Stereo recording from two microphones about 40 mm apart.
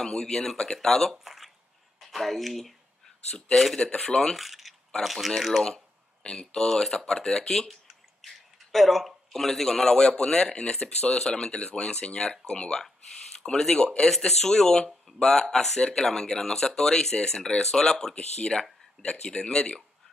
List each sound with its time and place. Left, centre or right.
0.0 s a man's voice: centre
1.1 s a sound: centre
2.0 s speech: centre
3.8 s a man's voice: centre
4.4 s a sound: centre
5.0 s speech: centre
6.5 s a man's voice: centre
8.7 s a man's voice: centre; by 19.8 s left